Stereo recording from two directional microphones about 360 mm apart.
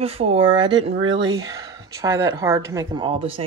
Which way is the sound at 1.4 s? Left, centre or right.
Centre.